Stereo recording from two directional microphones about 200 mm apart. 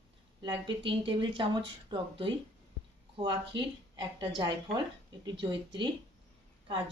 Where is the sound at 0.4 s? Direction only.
25° right (ahead or behind).